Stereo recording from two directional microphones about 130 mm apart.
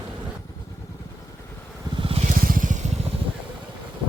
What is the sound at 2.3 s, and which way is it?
Vehicle, 90° right.